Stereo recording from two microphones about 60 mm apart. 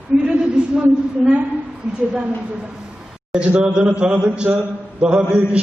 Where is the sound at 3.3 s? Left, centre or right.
Centre.